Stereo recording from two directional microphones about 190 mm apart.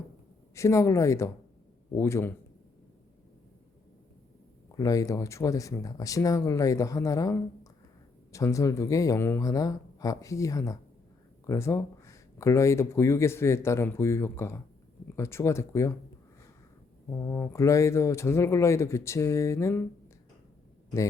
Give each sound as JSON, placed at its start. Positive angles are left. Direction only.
{"t": 0.5, "sound": "speech", "side_deg": 15}
{"t": 4.7, "sound": "speech", "side_deg": 20}
{"t": 17.1, "sound": "speech", "side_deg": 15}